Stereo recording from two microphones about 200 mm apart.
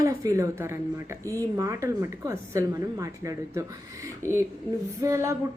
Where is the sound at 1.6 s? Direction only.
15° right (ahead or behind).